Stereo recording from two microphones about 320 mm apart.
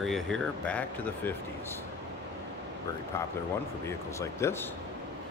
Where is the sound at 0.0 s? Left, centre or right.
Centre.